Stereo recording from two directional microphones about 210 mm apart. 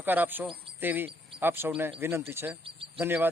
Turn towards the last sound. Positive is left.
turn(degrees=-10)  # may be behind; listen again after turning